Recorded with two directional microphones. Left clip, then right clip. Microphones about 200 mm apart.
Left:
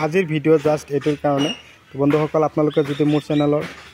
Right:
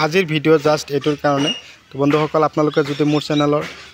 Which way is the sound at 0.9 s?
Centre (ahead or behind).